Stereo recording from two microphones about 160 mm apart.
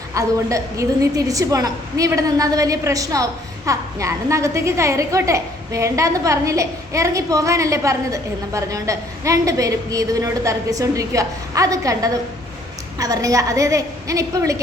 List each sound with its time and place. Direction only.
0.1 s a woman's voice: 20° right (ahead or behind)